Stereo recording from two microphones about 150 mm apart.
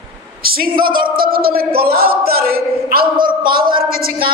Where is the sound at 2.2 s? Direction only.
90° right.